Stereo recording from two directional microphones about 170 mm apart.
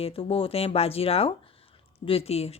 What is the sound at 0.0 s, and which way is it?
Speech, 35° left (ahead or behind).